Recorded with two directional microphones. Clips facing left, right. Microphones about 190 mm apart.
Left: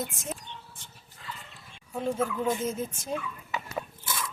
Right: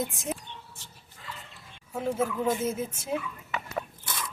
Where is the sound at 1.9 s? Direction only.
5° right (ahead or behind).